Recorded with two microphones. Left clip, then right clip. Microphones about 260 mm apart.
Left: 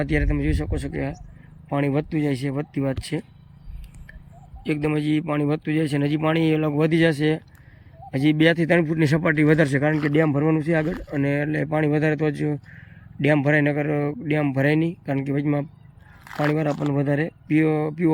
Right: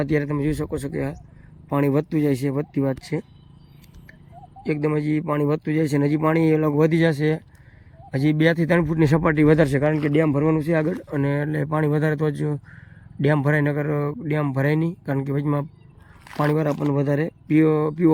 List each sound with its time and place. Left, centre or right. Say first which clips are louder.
0.0 s speech: right 1 dB; centre
4.6 s speech: right 1 dB; centre
6.8 s speech: even; centre
16.2 s a sound: right 1 dB; centre
16.7 s speech: right 1 dB; centre